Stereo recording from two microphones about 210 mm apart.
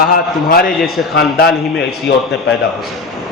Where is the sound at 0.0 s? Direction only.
45° left (ahead or behind).